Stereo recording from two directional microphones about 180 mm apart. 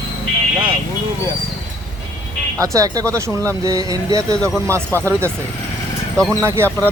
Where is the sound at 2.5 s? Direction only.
15° right (ahead or behind).